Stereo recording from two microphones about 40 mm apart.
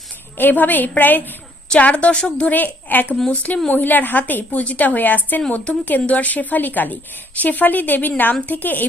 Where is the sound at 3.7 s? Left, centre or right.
Left.